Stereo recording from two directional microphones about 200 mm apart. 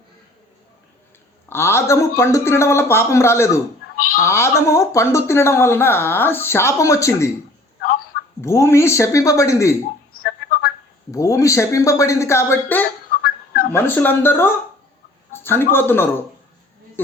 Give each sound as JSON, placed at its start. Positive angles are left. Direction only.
{"t": 1.5, "sound": "speech", "side_deg": 10}
{"t": 8.4, "sound": "speech", "side_deg": 15}
{"t": 10.2, "sound": "music", "side_deg": 50}
{"t": 11.1, "sound": "speech", "side_deg": 15}
{"t": 13.2, "sound": "a sound", "side_deg": 50}
{"t": 13.7, "sound": "a man's voice", "side_deg": 10}